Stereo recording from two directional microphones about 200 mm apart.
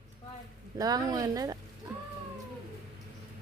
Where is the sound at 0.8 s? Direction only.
20° right (ahead or behind).